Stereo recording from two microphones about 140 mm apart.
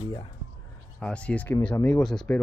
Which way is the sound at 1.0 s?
10° left (ahead or behind).